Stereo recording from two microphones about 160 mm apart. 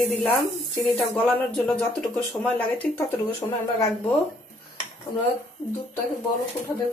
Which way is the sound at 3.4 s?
20° left (ahead or behind).